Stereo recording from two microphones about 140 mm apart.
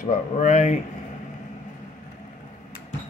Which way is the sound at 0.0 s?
60° left (ahead or behind).